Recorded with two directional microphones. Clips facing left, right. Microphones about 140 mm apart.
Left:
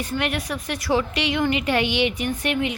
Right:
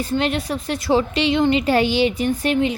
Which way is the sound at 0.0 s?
30° right (ahead or behind).